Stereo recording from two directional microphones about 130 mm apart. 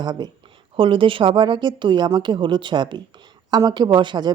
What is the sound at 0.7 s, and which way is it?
A woman's voice, 45° right (ahead or behind).